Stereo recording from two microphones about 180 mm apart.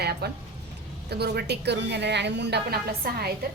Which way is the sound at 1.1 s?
65° right (ahead or behind).